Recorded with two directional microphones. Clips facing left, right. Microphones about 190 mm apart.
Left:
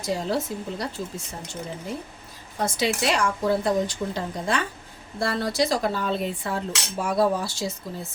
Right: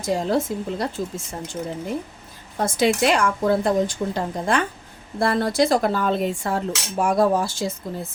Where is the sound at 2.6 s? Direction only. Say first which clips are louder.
Right 5 dB; 50° right (ahead or behind).